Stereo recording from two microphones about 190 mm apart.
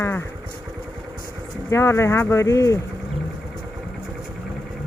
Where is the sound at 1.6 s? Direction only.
15° left (ahead or behind).